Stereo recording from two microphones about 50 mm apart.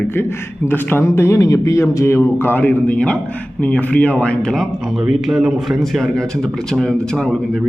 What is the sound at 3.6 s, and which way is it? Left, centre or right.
Speech, left.